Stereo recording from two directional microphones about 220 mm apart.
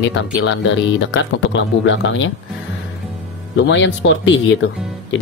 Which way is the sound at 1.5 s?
55° left (ahead or behind).